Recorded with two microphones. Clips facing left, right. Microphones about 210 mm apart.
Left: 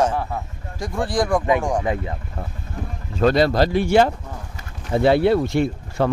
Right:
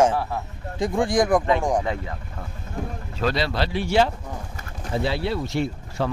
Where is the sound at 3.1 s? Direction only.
50° left (ahead or behind).